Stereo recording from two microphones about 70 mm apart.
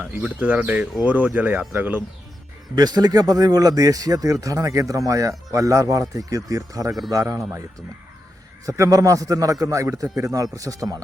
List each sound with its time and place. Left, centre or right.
0.0 s speech: right
2.7 s a man's voice: right
8.6 s a man's voice: right